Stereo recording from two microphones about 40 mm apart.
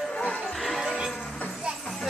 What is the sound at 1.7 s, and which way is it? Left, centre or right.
Music, right.